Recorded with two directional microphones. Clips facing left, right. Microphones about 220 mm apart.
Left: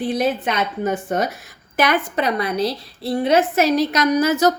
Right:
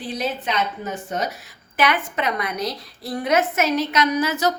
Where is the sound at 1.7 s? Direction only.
40° left (ahead or behind).